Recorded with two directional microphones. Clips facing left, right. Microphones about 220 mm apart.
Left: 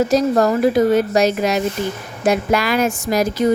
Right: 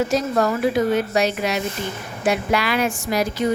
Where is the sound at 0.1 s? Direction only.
40° left (ahead or behind).